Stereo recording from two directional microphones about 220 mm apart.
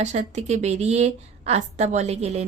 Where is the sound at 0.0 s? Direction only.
30° right (ahead or behind).